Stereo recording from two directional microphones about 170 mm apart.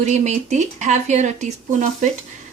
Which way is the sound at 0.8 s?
45° right (ahead or behind).